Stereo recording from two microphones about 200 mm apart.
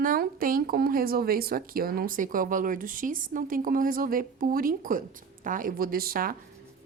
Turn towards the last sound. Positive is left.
turn(degrees=-45)  # may be behind; listen again after turning